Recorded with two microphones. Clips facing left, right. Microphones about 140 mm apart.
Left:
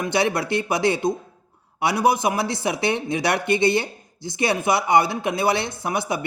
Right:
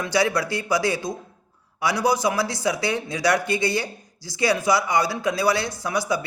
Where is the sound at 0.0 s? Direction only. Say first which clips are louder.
Even; 25° left (ahead or behind).